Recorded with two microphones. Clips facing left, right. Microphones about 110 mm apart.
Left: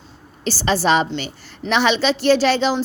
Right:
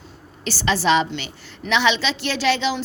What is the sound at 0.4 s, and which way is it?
A woman's voice, 35° left (ahead or behind).